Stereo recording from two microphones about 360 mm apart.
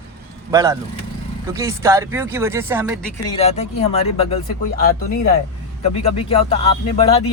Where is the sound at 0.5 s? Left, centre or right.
Centre.